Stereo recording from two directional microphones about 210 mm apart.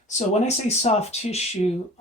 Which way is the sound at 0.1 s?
30° left (ahead or behind).